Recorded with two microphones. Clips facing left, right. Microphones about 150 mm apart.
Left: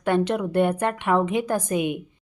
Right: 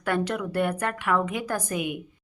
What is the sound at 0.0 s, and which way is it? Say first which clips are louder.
Speech: left 5 dB; 25° left (ahead or behind).